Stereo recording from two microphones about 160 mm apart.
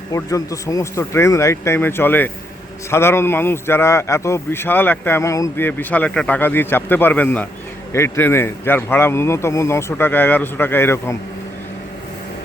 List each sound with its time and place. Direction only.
0.1 s a man's voice: 20° left (ahead or behind)